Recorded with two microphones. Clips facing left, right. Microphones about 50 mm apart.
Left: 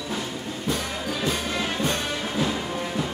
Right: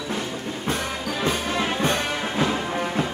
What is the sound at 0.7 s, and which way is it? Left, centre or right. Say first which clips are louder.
Music: right 1 dB; right.